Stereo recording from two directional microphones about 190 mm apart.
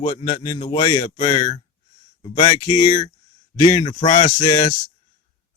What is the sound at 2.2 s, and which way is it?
Speech, 25° left (ahead or behind).